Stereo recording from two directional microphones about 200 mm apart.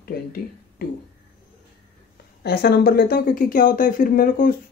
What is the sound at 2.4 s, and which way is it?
Speech, 50° left (ahead or behind).